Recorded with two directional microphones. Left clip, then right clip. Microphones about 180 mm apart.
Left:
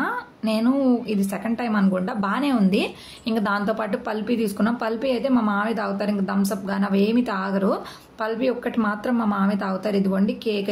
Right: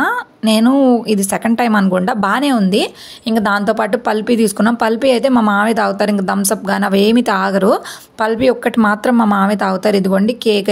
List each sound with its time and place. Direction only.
0.0 s a woman's voice: 45° right (ahead or behind)